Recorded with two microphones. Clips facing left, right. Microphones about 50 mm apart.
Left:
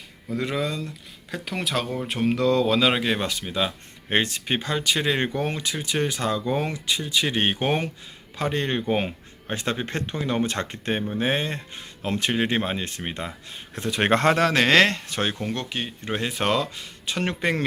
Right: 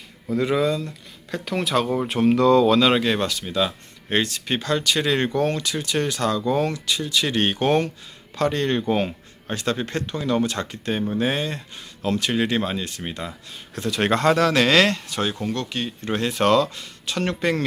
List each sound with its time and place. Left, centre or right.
0.3 s speech: centre; by 17.7 s left